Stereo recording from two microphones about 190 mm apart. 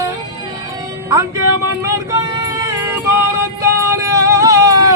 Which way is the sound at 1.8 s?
15° right (ahead or behind).